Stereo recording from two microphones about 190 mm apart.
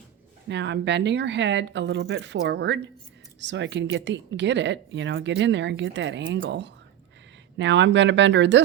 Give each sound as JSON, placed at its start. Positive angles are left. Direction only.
{"t": 0.4, "sound": "speech", "side_deg": -65}